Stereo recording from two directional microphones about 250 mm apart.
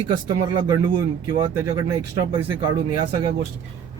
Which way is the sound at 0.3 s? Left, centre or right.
Centre.